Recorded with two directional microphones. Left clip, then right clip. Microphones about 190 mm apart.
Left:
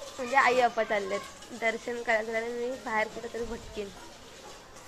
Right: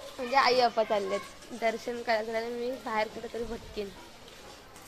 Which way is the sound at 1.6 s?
20° right (ahead or behind).